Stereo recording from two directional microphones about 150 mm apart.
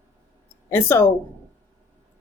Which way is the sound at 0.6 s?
15° left (ahead or behind).